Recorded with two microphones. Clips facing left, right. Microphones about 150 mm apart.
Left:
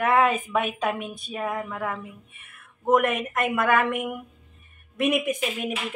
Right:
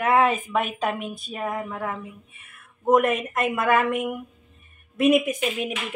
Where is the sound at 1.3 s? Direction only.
Centre (ahead or behind).